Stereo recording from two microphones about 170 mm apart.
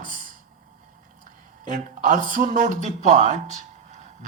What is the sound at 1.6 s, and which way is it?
A man's voice, 50° right (ahead or behind).